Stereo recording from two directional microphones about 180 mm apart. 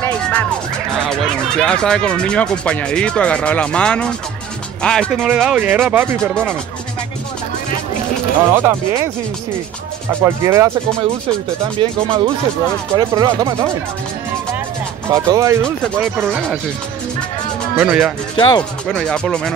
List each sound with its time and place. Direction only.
0.0 s music: 10° left (ahead or behind)
1.0 s speech: 5° left (ahead or behind)
5.1 s speech: 5° right (ahead or behind)
8.5 s speech: 10° right (ahead or behind)
10.2 s speech: 15° right (ahead or behind)
11.8 s speech: 25° right (ahead or behind)
15.0 s speech: 15° right (ahead or behind)
17.7 s speech: 10° right (ahead or behind)
18.3 s speech: 25° left (ahead or behind)
18.9 s speech: 5° left (ahead or behind)